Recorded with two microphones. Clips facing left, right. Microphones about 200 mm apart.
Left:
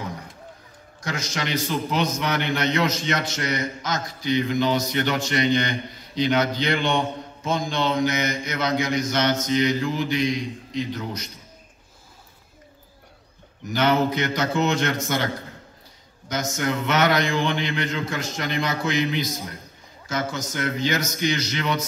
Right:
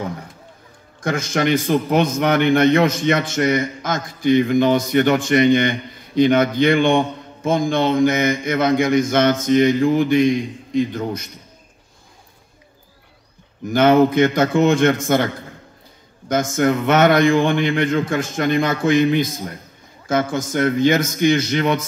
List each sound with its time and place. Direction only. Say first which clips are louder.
1.0 s a man's voice: right 10 dB; 55° right (ahead or behind)
13.7 s a man's voice: right 8 dB; 50° right (ahead or behind)
16.3 s a man's voice: right 8 dB; 50° right (ahead or behind)